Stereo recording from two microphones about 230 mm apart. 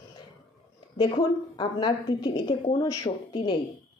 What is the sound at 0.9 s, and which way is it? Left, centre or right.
A woman's voice, centre.